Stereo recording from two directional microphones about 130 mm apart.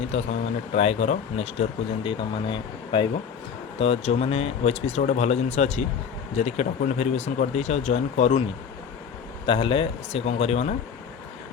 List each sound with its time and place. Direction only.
0.1 s speech: 60° left (ahead or behind)
2.0 s speech: 40° left (ahead or behind)
3.8 s speech: 50° left (ahead or behind)
9.5 s speech: 40° left (ahead or behind)